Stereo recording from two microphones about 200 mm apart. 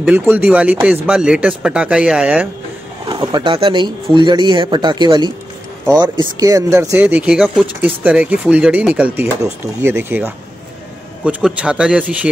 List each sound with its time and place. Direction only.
0.0 s speech: 10° right (ahead or behind)
3.1 s speech: 20° right (ahead or behind)
5.9 s speech: 10° right (ahead or behind)